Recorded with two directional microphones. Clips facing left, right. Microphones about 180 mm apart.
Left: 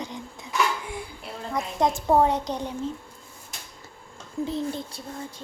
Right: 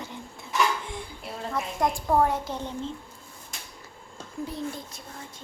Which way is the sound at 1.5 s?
20° left (ahead or behind).